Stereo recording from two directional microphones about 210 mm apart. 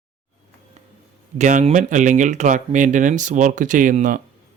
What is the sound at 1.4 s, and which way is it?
Speech, 35° right (ahead or behind).